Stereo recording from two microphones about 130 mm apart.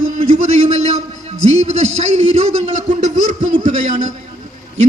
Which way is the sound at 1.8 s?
60° right (ahead or behind).